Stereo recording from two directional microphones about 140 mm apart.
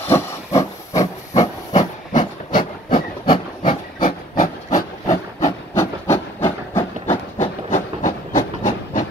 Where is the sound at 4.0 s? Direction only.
65° left (ahead or behind).